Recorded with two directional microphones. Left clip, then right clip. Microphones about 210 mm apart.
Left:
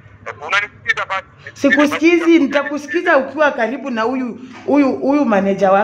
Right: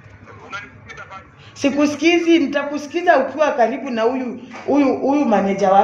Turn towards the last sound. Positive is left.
turn(degrees=50)  # may be behind; listen again after turning